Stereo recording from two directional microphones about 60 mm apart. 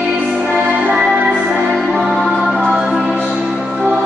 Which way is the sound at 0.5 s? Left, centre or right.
Right.